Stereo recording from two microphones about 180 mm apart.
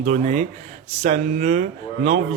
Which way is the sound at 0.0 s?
40° right (ahead or behind).